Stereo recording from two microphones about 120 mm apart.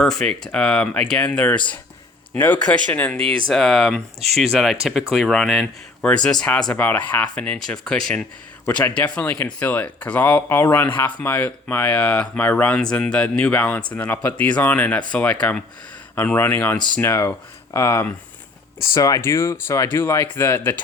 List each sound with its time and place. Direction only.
0.0 s speech: 5° left (ahead or behind)